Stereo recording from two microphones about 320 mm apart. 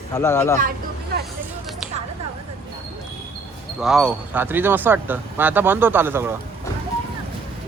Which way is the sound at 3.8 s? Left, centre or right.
Centre.